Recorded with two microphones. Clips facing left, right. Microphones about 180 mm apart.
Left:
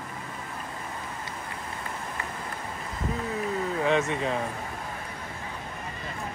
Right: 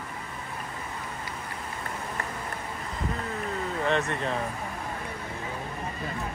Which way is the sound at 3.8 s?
Centre (ahead or behind).